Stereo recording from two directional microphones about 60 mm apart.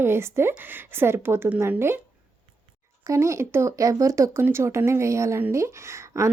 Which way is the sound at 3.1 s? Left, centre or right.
Right.